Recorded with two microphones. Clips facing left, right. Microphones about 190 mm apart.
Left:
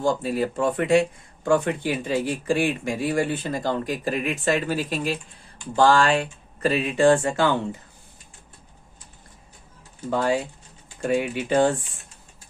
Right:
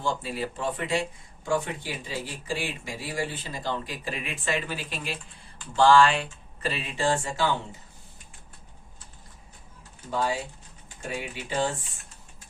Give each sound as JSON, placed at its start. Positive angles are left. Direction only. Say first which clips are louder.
{"t": 0.0, "sound": "speech", "louder": "left 7 dB", "side_deg": 45}
{"t": 10.1, "sound": "speech", "louder": "left 6 dB", "side_deg": 55}